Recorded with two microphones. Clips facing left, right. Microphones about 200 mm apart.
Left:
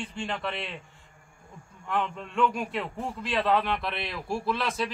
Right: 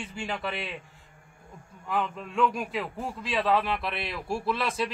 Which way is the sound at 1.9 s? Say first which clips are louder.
Even; 5° right (ahead or behind).